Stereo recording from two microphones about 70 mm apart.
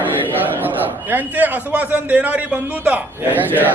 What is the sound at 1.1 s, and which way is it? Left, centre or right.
A man's voice, right.